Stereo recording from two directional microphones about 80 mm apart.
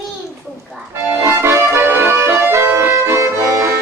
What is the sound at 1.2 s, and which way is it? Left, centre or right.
Accordion, right.